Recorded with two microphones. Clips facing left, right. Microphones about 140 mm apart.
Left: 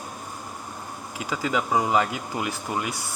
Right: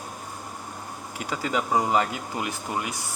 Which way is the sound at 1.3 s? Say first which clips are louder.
Left 1 dB; 35° right (ahead or behind).